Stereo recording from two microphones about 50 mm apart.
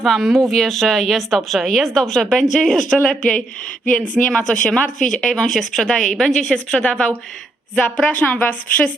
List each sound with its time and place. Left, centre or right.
0.0 s a woman's voice: centre
3.8 s a woman's voice: left
7.8 s a woman's voice: left